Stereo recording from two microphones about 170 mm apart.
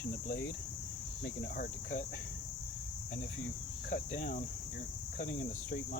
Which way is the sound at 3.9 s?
50° left (ahead or behind).